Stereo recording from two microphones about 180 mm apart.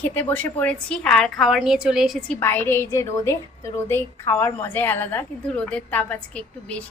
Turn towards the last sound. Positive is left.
turn(degrees=5)  # may be behind; listen again after turning